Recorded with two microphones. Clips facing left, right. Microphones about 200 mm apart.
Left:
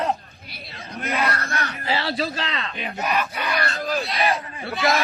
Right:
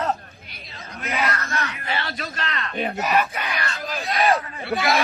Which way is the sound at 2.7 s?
45° right (ahead or behind).